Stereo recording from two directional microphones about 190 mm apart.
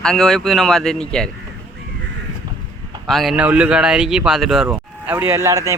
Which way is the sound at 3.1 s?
Centre (ahead or behind).